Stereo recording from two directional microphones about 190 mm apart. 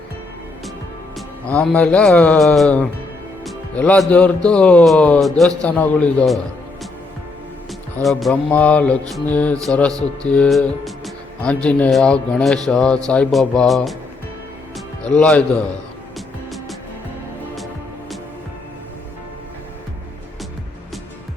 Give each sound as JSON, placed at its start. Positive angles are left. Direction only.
{"t": 1.5, "sound": "music", "side_deg": 5}
{"t": 7.7, "sound": "music", "side_deg": 5}
{"t": 10.2, "sound": "speech", "side_deg": 5}
{"t": 15.0, "sound": "speech", "side_deg": 5}
{"t": 16.1, "sound": "music", "side_deg": 0}